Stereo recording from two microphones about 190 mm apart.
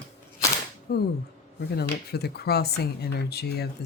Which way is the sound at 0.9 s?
55° left (ahead or behind).